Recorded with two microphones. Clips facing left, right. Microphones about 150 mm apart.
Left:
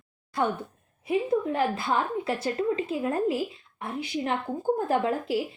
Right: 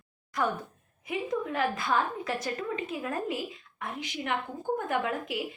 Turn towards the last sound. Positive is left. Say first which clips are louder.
# left 5 dB
turn(degrees=35)  # may be behind; listen again after turning